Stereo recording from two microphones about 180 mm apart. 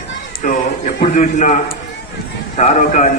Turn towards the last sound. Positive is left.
turn(degrees=40)  # may be behind; listen again after turning